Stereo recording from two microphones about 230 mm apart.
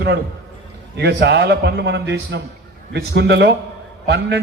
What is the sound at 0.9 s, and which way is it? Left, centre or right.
A man's voice, right.